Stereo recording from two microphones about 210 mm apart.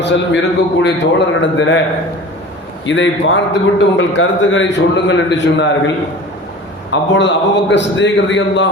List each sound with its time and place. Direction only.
0.0 s a man's voice: 55° left (ahead or behind)
2.8 s a man's voice: 60° left (ahead or behind)
6.9 s a man's voice: 60° left (ahead or behind)